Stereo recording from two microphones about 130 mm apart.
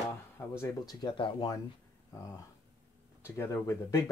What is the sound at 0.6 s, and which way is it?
Speech, 25° left (ahead or behind).